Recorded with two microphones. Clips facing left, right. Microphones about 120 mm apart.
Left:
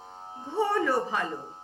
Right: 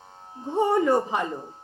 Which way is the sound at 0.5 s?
20° right (ahead or behind).